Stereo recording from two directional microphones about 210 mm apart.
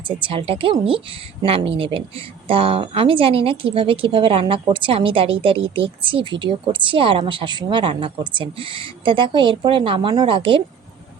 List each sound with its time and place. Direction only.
0.2 s a woman's voice: 25° right (ahead or behind)